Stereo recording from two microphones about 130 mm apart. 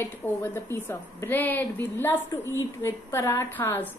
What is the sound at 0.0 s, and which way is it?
A woman's voice, 15° left (ahead or behind).